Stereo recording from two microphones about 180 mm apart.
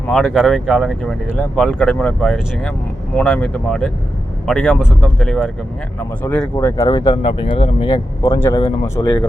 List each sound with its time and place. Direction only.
0.1 s speech: centre (ahead or behind); by 7.9 s 25° left (ahead or behind)
8.2 s speech: 15° left (ahead or behind)